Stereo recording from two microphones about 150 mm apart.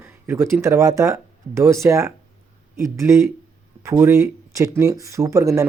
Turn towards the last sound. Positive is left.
turn(degrees=-20)  # may be behind; listen again after turning